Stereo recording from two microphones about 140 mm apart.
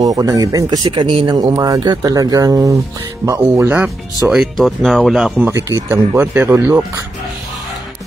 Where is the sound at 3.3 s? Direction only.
15° right (ahead or behind).